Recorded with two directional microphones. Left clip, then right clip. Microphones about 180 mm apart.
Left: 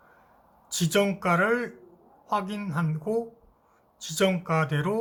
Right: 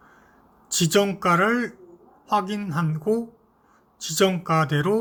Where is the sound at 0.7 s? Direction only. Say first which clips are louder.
Right 4 dB; 15° right (ahead or behind).